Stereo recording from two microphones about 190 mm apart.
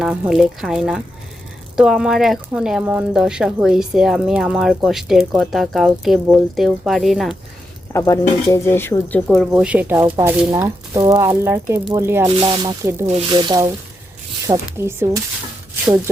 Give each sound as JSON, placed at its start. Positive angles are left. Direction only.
{"t": 0.0, "sound": "speech", "side_deg": 0}
{"t": 7.9, "sound": "speech", "side_deg": 15}
{"t": 12.4, "sound": "speech", "side_deg": -25}
{"t": 13.1, "sound": "speech", "side_deg": -30}